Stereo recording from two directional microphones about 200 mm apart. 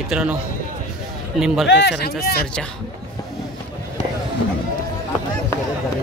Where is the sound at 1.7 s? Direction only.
60° left (ahead or behind).